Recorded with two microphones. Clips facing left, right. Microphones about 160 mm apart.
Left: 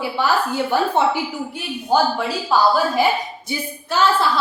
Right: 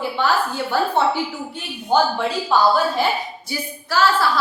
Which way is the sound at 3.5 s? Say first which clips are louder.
Left 1 dB; 20° left (ahead or behind).